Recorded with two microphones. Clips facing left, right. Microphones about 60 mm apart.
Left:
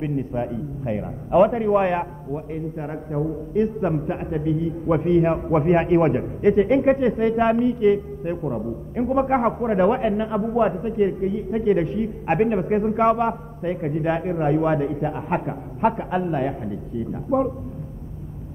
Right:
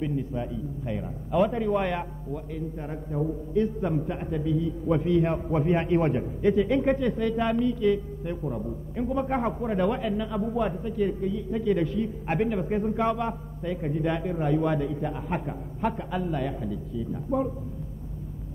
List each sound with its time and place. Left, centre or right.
0.0 s a man's voice: left